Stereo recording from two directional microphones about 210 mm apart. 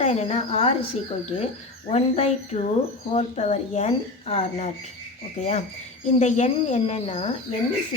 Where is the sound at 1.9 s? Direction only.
30° left (ahead or behind).